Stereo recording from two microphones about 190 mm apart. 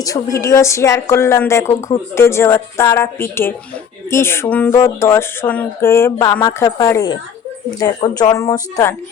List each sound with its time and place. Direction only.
0.0 s speech: 15° left (ahead or behind)